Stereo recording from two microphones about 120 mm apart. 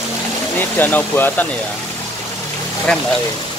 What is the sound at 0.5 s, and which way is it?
Speech, 15° left (ahead or behind).